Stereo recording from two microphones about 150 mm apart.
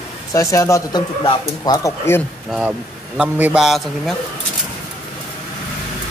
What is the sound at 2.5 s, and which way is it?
A man's voice, 5° right (ahead or behind).